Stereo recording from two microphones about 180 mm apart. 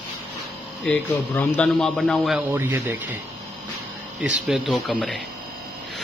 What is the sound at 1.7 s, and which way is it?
A man's voice, centre (ahead or behind).